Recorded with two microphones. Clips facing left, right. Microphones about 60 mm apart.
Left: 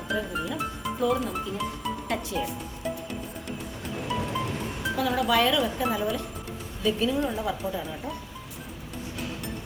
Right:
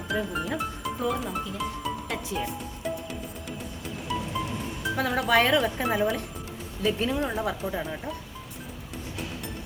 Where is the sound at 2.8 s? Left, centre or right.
Centre.